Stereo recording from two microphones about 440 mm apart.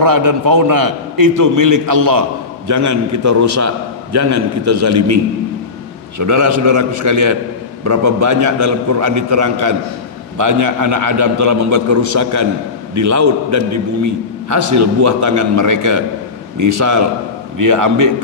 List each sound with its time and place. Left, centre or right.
0.0 s a man's voice: right
6.1 s a man's voice: right
17.6 s a man's voice: right